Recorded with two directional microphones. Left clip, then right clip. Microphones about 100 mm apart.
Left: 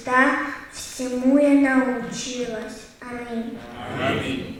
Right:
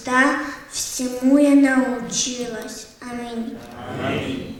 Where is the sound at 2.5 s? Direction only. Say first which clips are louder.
Even; 35° right (ahead or behind).